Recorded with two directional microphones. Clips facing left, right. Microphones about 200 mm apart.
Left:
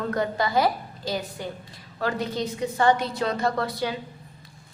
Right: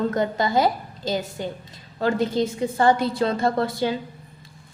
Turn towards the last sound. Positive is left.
turn(degrees=-25)  # may be behind; listen again after turning